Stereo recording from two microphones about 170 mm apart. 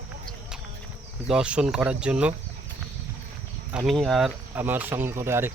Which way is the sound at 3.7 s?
5° right (ahead or behind).